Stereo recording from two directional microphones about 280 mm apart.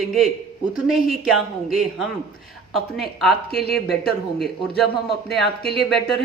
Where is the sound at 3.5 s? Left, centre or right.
Left.